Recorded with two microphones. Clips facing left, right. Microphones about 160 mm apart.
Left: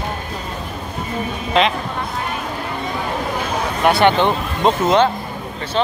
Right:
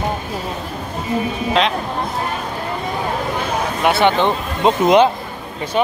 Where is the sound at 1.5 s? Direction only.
Centre (ahead or behind).